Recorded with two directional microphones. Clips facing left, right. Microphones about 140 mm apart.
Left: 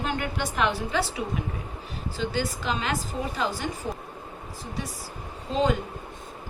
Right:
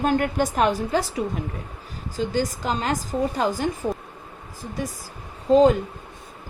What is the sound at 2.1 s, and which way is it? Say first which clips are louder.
Speech: right 5 dB; 40° right (ahead or behind).